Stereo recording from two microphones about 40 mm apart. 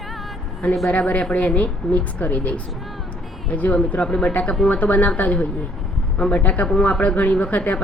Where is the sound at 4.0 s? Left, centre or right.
Left.